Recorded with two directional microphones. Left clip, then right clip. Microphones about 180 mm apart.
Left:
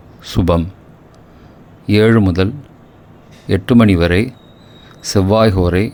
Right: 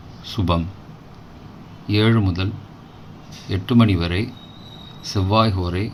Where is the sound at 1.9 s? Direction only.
50° left (ahead or behind).